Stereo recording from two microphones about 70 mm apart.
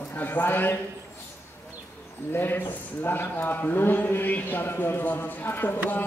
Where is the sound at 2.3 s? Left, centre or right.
Left.